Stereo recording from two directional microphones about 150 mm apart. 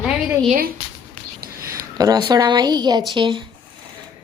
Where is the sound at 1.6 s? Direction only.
25° right (ahead or behind).